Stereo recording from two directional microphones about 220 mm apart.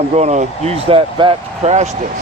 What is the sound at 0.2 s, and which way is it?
Speech, 30° right (ahead or behind).